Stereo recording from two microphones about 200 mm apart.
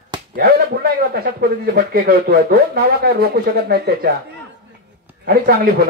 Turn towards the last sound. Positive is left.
turn(degrees=-45)  # may be behind; listen again after turning